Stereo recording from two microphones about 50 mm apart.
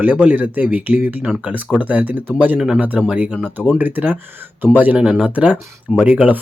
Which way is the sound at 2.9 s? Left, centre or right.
Right.